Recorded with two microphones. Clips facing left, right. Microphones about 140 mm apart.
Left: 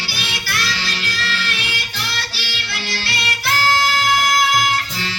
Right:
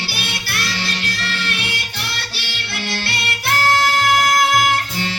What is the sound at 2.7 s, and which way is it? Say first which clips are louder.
Music: right 3 dB; 55° right (ahead or behind).